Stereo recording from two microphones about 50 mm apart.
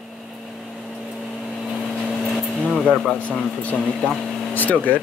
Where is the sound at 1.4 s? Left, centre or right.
Centre.